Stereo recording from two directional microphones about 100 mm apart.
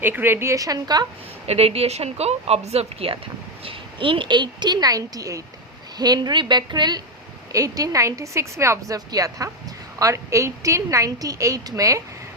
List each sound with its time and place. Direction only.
0.0 s a woman's voice: 20° right (ahead or behind); by 1.0 s 40° right (ahead or behind)
1.5 s speech: 85° right
3.6 s a woman's voice: 65° right (ahead or behind); by 7.0 s 45° right (ahead or behind)
7.5 s a woman's voice: 35° right (ahead or behind)